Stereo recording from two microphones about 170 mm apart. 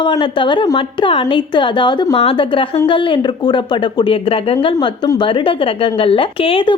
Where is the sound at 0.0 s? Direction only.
30° left (ahead or behind).